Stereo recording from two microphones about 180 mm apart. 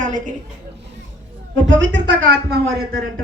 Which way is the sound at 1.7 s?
90° right.